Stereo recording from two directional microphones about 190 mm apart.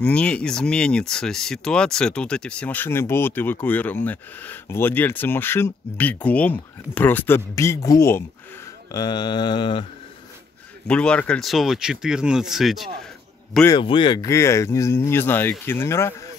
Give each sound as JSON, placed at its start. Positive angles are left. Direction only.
{"t": 0.0, "sound": "speech", "side_deg": 5}
{"t": 8.9, "sound": "mantra", "side_deg": 20}
{"t": 10.9, "sound": "speech", "side_deg": 5}
{"t": 13.7, "sound": "speech", "side_deg": 25}